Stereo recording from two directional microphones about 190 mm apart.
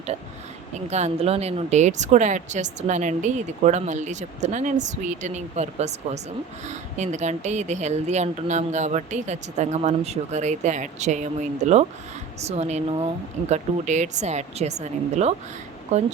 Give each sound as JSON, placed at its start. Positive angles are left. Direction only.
{"t": 0.7, "sound": "speech", "side_deg": -35}